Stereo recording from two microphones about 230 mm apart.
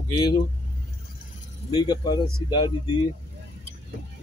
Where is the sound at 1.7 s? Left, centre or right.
Centre.